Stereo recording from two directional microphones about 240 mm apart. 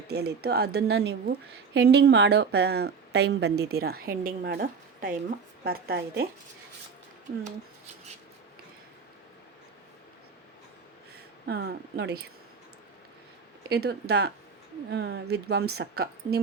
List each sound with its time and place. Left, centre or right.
0.1 s a woman's voice: right
11.4 s a woman's voice: right
13.7 s a woman's voice: right